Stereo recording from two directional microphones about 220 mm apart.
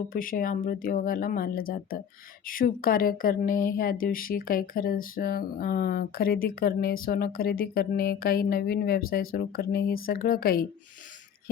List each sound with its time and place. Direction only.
0.1 s speech: 40° left (ahead or behind)